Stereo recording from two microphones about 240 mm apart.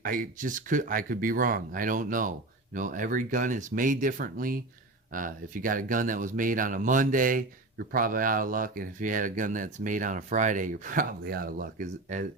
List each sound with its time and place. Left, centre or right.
0.0 s speech: right